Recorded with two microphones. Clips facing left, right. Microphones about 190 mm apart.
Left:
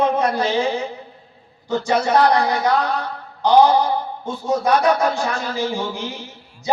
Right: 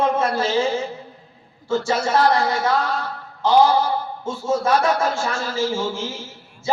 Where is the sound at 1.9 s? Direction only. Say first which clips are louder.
Left 3 dB; 15° left (ahead or behind).